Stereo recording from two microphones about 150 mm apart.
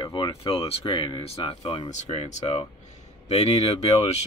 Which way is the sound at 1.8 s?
50° left (ahead or behind).